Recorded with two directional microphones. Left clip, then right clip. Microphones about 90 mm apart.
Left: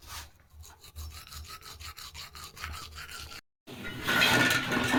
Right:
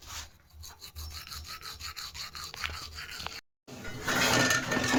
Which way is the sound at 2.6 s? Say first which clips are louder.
Right 2 dB; 10° right (ahead or behind).